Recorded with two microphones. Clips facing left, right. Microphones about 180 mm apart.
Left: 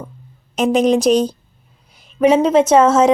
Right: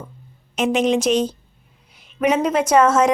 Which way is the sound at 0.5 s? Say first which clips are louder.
Left 4 dB; 35° left (ahead or behind).